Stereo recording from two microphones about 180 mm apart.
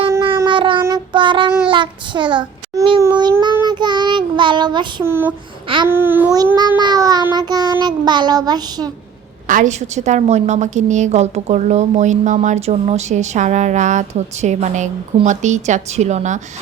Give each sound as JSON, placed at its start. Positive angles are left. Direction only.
{"t": 0.4, "sound": "child singing", "side_deg": -25}
{"t": 5.0, "sound": "babbling", "side_deg": -15}
{"t": 5.6, "sound": "babbling", "side_deg": -30}
{"t": 5.9, "sound": "babbling", "side_deg": -10}
{"t": 6.3, "sound": "child singing", "side_deg": -20}
{"t": 9.5, "sound": "a woman's voice", "side_deg": -45}